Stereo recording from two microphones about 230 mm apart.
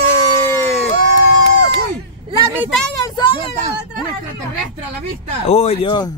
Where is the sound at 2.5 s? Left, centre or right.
Centre.